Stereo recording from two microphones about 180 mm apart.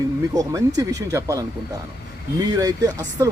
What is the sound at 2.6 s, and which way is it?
Speech, 20° right (ahead or behind).